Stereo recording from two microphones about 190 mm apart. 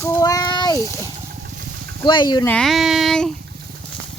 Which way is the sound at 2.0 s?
20° left (ahead or behind).